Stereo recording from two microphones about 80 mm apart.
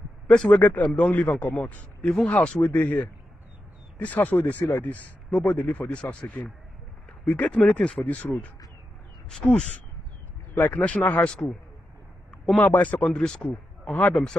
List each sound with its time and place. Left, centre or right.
0.3 s a man's voice: centre
4.0 s a man's voice: left
10.5 s a man's voice: left
12.5 s a man's voice: left